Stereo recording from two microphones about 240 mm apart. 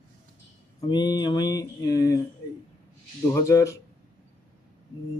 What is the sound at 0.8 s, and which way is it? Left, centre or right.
Speech, centre.